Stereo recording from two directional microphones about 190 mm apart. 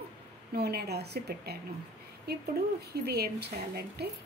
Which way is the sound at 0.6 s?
55° right (ahead or behind).